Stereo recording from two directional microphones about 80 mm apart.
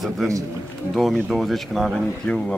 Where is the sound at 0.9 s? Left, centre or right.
Centre.